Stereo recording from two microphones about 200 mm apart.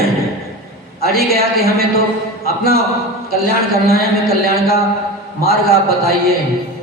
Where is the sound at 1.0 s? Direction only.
50° right (ahead or behind).